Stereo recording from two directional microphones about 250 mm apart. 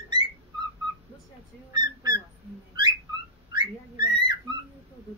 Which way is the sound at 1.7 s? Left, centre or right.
Centre.